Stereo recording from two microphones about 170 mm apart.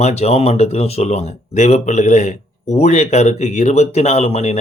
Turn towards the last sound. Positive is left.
turn(degrees=40)  # may be behind; listen again after turning